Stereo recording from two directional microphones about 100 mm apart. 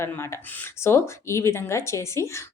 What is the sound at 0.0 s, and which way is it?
A woman's voice, 25° left (ahead or behind).